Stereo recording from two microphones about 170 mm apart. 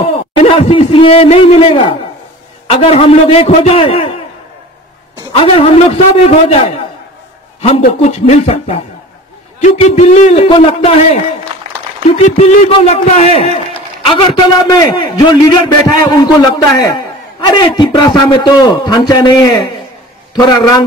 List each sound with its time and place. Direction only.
0.4 s a man's voice: 35° left (ahead or behind)
5.3 s a man's voice: 35° left (ahead or behind)
7.8 s a man's voice: 45° left (ahead or behind)
12.4 s a man's voice: 40° left (ahead or behind); by 20.8 s 20° left (ahead or behind)